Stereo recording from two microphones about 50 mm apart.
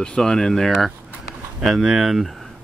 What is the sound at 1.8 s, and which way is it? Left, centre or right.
Speech, centre.